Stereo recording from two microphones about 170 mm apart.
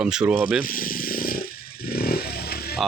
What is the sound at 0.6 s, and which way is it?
Motorcycle, 55° left (ahead or behind).